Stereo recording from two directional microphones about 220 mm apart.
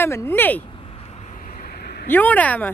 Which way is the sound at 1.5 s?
40° left (ahead or behind).